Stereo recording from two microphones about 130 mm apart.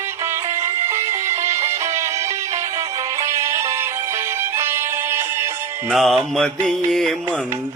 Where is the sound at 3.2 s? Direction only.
25° right (ahead or behind).